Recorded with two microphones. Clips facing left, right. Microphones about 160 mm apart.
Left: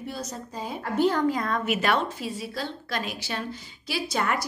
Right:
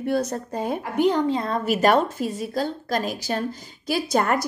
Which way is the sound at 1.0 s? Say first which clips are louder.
Right 2 dB; 20° right (ahead or behind).